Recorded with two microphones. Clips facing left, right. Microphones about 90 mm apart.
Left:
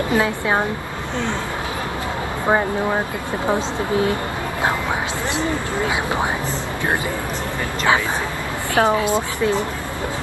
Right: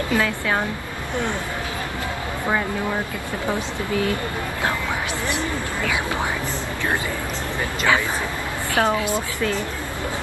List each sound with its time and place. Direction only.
0.1 s a woman's voice: 20° left (ahead or behind)
3.4 s a woman's voice: 25° left (ahead or behind)
8.7 s a woman's voice: 25° left (ahead or behind)